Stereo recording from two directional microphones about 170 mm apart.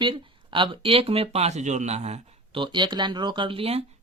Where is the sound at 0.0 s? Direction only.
30° right (ahead or behind).